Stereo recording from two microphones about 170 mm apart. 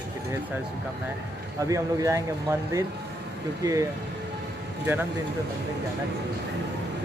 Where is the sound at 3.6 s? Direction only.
20° right (ahead or behind).